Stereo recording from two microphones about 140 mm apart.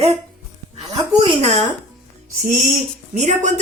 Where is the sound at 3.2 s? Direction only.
55° right (ahead or behind).